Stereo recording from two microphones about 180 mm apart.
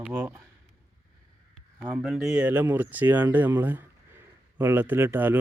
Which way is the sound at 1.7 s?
5° right (ahead or behind).